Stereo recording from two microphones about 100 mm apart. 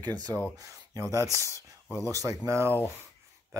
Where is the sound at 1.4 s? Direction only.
30° left (ahead or behind).